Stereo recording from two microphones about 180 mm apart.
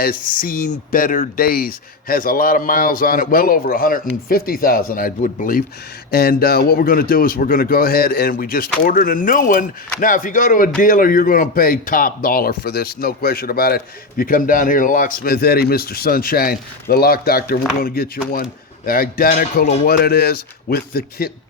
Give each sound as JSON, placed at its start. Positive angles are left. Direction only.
{"t": 0.0, "sound": "a man's voice", "side_deg": 50}